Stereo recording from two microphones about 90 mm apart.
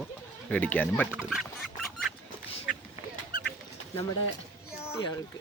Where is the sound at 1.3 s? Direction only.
Centre (ahead or behind).